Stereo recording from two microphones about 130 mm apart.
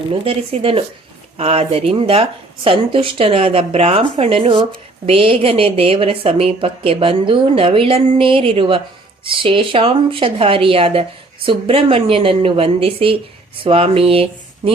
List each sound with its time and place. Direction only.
0.1 s a woman's voice: 45° right (ahead or behind)